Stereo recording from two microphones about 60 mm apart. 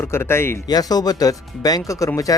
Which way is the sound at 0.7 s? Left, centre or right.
Left.